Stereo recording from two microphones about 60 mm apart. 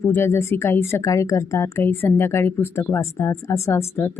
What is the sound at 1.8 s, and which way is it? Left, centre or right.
Speech, left.